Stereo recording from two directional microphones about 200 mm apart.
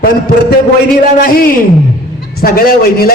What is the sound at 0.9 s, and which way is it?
A man's voice, 45° left (ahead or behind).